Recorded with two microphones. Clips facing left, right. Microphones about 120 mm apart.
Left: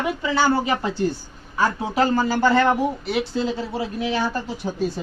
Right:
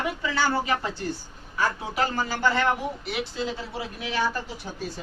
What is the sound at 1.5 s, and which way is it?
Speech, 35° left (ahead or behind).